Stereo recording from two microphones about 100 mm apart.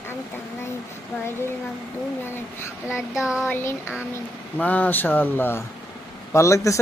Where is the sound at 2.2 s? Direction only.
25° left (ahead or behind).